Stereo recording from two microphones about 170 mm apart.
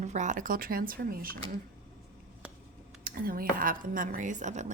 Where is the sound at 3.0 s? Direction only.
60° right (ahead or behind).